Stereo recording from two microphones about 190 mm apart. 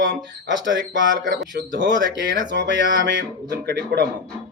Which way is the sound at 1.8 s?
70° right (ahead or behind).